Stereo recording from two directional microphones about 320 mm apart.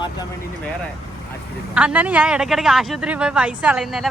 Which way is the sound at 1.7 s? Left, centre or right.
Centre.